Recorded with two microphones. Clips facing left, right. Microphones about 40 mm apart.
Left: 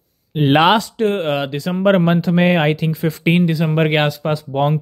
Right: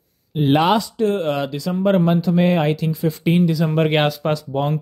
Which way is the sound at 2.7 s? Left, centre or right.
Left.